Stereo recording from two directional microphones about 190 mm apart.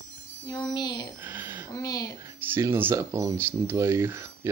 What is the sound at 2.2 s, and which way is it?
Speech, 10° right (ahead or behind).